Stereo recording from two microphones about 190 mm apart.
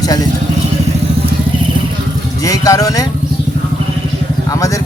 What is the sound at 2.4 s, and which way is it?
Speech, 20° left (ahead or behind).